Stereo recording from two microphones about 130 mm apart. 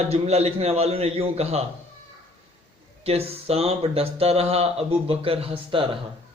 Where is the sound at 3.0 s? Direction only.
50° right (ahead or behind).